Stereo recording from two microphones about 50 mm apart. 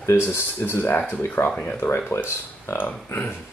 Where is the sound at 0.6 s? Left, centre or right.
Left.